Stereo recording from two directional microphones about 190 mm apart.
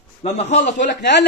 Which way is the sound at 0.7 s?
65° left (ahead or behind).